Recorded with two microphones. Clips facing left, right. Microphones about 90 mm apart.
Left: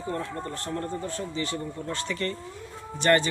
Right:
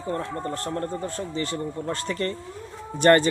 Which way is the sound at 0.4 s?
40° right (ahead or behind).